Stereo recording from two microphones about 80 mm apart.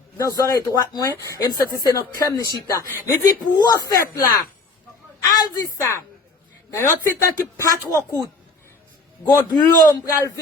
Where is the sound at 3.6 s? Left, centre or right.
Left.